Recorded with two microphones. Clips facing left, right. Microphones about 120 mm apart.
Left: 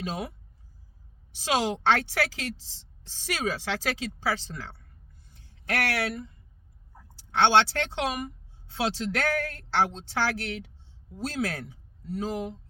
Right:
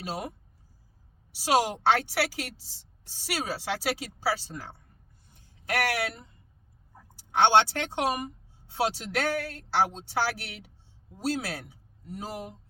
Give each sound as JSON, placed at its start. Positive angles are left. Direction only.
{"t": 1.3, "sound": "a woman's voice", "side_deg": -10}
{"t": 5.3, "sound": "a sound", "side_deg": -15}
{"t": 7.2, "sound": "a woman's voice", "side_deg": -15}